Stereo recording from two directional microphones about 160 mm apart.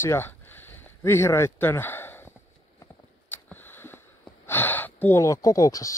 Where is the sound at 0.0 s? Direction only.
15° left (ahead or behind).